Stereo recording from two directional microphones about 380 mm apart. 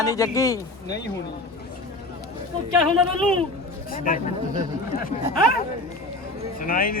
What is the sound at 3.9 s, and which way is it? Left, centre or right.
Speech, left.